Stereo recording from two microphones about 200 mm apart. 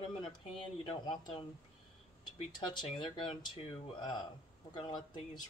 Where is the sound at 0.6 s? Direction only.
25° left (ahead or behind).